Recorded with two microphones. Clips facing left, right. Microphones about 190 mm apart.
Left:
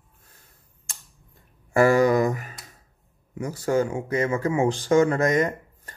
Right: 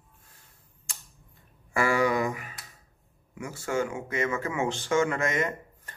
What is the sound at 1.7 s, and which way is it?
Speech, 40° left (ahead or behind).